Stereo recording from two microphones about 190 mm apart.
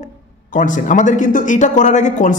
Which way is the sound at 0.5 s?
45° left (ahead or behind).